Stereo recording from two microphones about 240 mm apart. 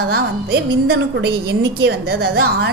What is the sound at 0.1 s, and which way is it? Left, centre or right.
A woman's voice, right.